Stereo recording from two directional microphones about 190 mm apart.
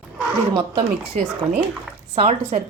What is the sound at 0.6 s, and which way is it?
Speech, 25° right (ahead or behind).